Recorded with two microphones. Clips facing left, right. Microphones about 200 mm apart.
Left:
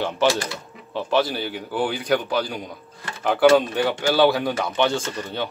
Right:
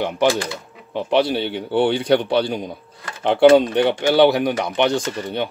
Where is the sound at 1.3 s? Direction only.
25° right (ahead or behind).